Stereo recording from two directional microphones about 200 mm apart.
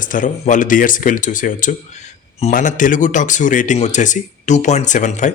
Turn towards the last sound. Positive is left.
turn(degrees=40)  # may be behind; listen again after turning